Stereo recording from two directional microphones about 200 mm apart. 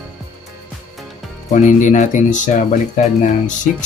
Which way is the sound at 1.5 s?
40° left (ahead or behind).